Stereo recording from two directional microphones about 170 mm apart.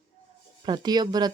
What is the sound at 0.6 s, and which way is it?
Speech, 25° right (ahead or behind).